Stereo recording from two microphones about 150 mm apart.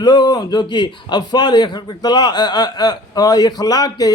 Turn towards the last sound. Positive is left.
turn(degrees=25)  # may be behind; listen again after turning